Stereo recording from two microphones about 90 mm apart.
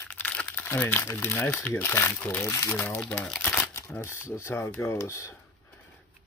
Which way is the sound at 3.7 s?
30° left (ahead or behind).